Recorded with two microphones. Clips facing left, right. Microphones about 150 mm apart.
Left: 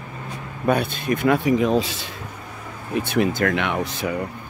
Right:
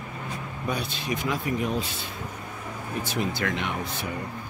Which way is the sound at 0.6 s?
55° left (ahead or behind).